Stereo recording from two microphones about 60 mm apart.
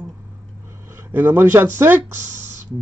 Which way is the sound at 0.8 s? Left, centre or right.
Right.